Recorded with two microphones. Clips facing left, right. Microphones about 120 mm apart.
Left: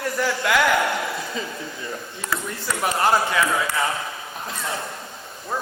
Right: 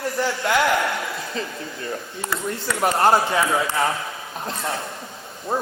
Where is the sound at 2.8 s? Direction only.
25° right (ahead or behind).